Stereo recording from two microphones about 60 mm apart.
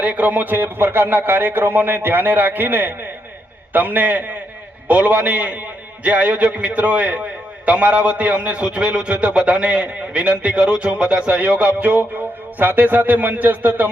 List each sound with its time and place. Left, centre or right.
0.0 s a man's voice: right